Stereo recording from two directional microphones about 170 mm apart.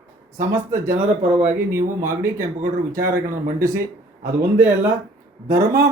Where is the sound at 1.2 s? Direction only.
45° right (ahead or behind).